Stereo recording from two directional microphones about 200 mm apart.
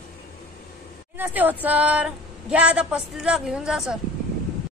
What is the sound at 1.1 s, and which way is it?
Speech, 10° right (ahead or behind).